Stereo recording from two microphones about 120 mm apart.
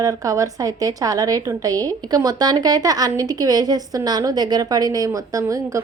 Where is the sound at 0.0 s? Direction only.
30° right (ahead or behind).